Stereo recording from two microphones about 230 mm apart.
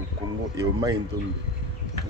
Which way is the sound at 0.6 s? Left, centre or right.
Centre.